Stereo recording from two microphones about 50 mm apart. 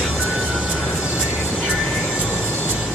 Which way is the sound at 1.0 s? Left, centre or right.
Centre.